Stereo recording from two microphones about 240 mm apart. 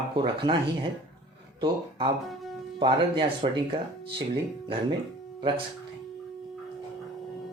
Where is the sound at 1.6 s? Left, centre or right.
Right.